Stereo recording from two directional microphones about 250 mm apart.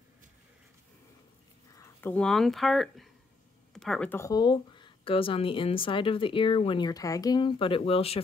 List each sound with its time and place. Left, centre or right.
1.8 s speech: centre; by 8.2 s left